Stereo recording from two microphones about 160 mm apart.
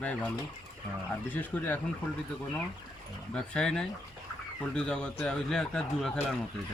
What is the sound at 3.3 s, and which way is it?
A man's voice, 5° left (ahead or behind).